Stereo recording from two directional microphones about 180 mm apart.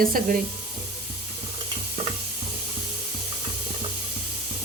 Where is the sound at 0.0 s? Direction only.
50° right (ahead or behind).